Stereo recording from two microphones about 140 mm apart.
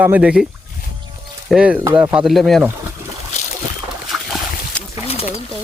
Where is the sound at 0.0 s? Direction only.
10° right (ahead or behind).